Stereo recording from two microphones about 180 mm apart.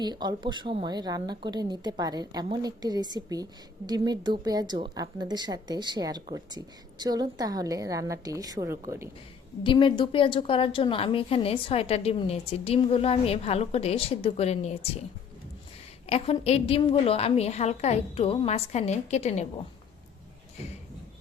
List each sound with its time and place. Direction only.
0.0 s a woman's voice: 25° right (ahead or behind)
9.6 s a woman's voice: 25° left (ahead or behind)
16.0 s a woman's voice: 35° left (ahead or behind)